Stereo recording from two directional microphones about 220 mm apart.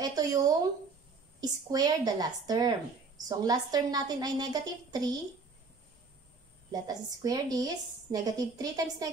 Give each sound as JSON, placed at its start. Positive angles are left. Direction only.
{"t": 0.0, "sound": "a woman's voice", "side_deg": -15}
{"t": 6.7, "sound": "a woman's voice", "side_deg": -15}